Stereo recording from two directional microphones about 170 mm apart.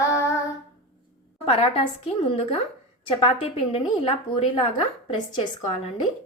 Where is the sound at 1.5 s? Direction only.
35° left (ahead or behind).